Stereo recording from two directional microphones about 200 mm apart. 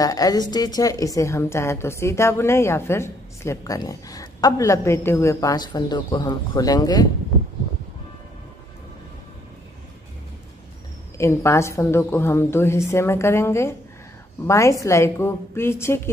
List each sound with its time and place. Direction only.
0.0 s a woman's voice: 15° left (ahead or behind)
11.1 s a woman's voice: 15° left (ahead or behind)